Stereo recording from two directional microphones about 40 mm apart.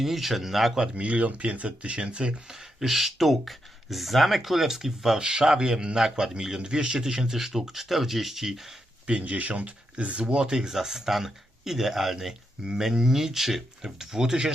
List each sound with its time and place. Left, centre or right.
0.0 s speech: centre
0.9 s speech: right
2.5 s a man's voice: centre
9.0 s a man's voice: right